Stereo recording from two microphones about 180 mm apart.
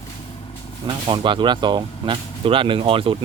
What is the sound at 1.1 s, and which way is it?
Speech, 25° right (ahead or behind).